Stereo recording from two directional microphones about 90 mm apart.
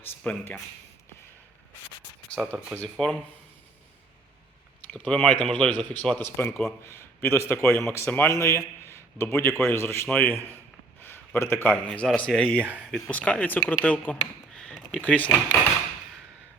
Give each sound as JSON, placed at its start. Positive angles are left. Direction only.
{"t": 0.2, "sound": "speech", "side_deg": 10}
{"t": 2.8, "sound": "speech", "side_deg": 5}
{"t": 4.9, "sound": "speech", "side_deg": 10}
{"t": 6.0, "sound": "a man's voice", "side_deg": 20}
{"t": 10.1, "sound": "a man's voice", "side_deg": 20}
{"t": 11.9, "sound": "speech", "side_deg": 10}
{"t": 14.5, "sound": "a sound", "side_deg": 5}